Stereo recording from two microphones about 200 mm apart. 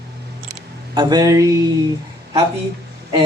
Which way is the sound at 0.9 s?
20° right (ahead or behind).